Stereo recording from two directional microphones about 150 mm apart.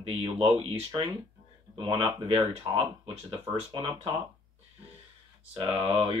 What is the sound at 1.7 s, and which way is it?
Speech, 35° right (ahead or behind).